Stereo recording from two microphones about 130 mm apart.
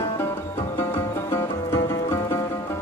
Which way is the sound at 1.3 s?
20° left (ahead or behind).